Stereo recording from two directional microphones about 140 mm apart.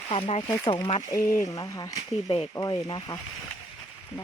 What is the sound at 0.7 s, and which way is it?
Speech, 40° left (ahead or behind).